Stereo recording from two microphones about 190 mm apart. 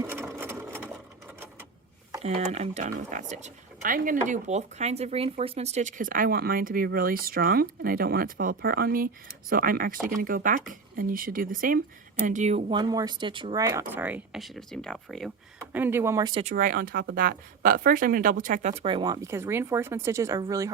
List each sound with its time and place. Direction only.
0.0 s sewing machine: 15° right (ahead or behind)
2.2 s speech: 35° right (ahead or behind)
12.7 s speech: 20° right (ahead or behind); by 15.3 s centre (ahead or behind)
15.7 s speech: 10° right (ahead or behind)
16.4 s speech: 40° right (ahead or behind); by 20.7 s 15° right (ahead or behind)